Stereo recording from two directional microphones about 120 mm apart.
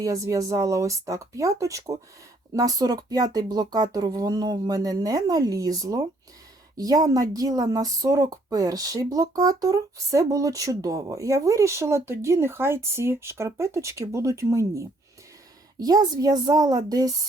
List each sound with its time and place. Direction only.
0.0 s speech: 30° right (ahead or behind)